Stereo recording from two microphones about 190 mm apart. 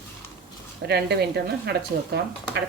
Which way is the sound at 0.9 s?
60° right (ahead or behind).